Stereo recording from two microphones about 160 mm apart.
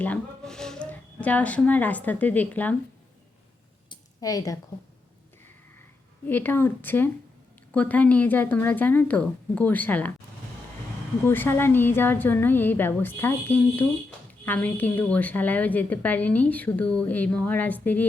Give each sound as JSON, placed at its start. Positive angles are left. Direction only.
{"t": 0.0, "sound": "speech", "side_deg": 5}
{"t": 3.8, "sound": "a sound", "side_deg": 20}
{"t": 6.2, "sound": "a woman's voice", "side_deg": 10}
{"t": 11.3, "sound": "a woman's voice", "side_deg": 15}